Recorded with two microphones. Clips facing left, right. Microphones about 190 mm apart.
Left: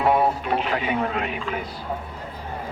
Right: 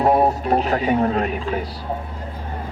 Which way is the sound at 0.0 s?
40° right (ahead or behind).